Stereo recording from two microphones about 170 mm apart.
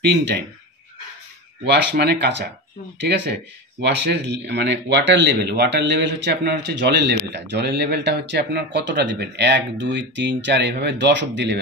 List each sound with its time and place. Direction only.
1.6 s speech: 90° right